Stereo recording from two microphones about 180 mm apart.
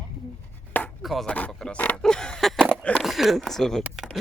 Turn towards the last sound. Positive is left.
turn(degrees=0)  # may be behind; listen again after turning